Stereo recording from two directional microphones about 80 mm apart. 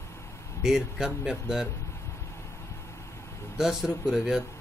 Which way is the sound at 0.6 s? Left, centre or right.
Centre.